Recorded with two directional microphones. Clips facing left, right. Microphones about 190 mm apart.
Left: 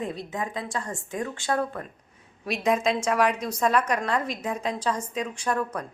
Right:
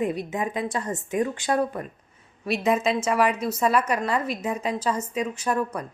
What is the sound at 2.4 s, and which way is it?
A woman's voice, centre (ahead or behind).